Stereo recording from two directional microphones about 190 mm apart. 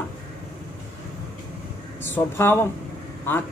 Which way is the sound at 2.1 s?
10° left (ahead or behind).